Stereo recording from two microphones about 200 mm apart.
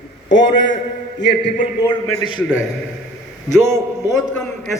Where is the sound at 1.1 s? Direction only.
60° left (ahead or behind).